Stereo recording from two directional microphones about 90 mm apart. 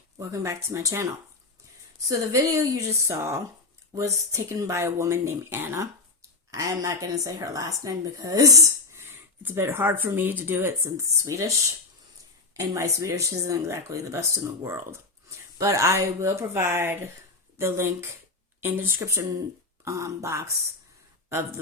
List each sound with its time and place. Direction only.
0.2 s a woman's voice: 35° right (ahead or behind)
12.5 s a woman's voice: 35° right (ahead or behind)